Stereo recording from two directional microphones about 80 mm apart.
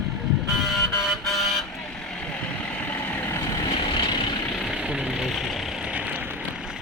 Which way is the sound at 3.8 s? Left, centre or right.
Left.